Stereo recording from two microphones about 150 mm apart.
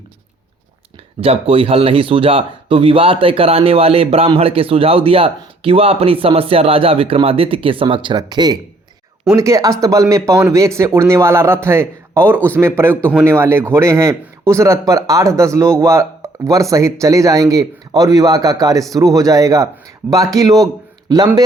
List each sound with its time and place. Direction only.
1.2 s a man's voice: 40° right (ahead or behind); by 20.7 s 20° right (ahead or behind)